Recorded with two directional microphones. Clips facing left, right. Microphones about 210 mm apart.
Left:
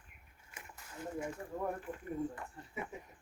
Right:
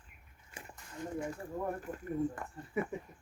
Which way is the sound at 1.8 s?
45° right (ahead or behind).